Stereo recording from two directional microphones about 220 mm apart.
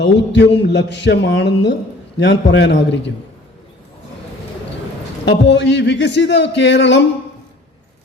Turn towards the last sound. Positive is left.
turn(degrees=55)  # may be behind; listen again after turning